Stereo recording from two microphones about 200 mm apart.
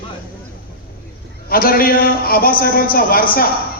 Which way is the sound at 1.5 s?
50° left (ahead or behind).